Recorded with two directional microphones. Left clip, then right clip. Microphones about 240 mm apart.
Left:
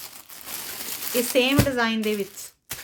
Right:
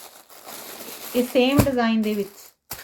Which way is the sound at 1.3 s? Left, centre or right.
Left.